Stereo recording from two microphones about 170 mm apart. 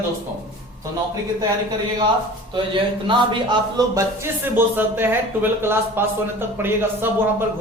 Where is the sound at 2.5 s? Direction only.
30° right (ahead or behind); by 7.1 s 15° right (ahead or behind).